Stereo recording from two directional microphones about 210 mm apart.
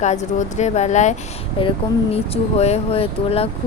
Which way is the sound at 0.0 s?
35° left (ahead or behind).